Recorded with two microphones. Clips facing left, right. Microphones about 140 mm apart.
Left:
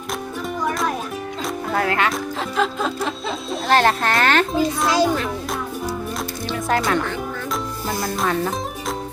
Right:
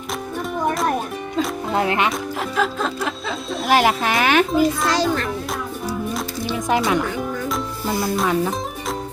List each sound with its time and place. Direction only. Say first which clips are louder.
1.7 s speech: right 1 dB; 20° right (ahead or behind)
2.6 s a child's voice: left 1 dB; centre (ahead or behind)
4.9 s a child's voice: left 2 dB; 10° left (ahead or behind)
6.5 s music: right 1 dB; 15° right (ahead or behind)